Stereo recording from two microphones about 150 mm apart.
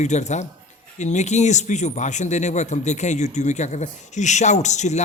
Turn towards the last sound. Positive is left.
turn(degrees=50)  # may be behind; listen again after turning